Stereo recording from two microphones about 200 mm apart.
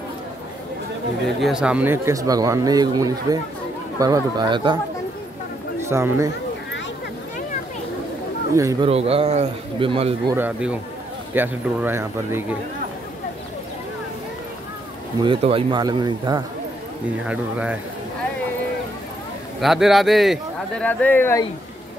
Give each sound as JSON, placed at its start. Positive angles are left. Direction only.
{"t": 1.4, "sound": "a man's voice", "side_deg": -5}
{"t": 5.9, "sound": "speech", "side_deg": -15}
{"t": 8.8, "sound": "a man's voice", "side_deg": -30}
{"t": 10.3, "sound": "speech", "side_deg": -10}
{"t": 15.2, "sound": "a man's voice", "side_deg": -25}
{"t": 17.3, "sound": "speech", "side_deg": -5}
{"t": 19.6, "sound": "a man's voice", "side_deg": 0}